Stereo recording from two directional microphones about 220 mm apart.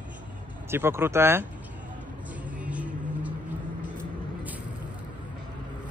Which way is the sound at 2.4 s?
5° right (ahead or behind).